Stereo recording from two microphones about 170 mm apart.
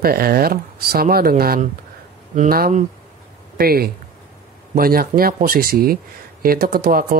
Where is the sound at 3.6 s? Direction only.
65° right (ahead or behind).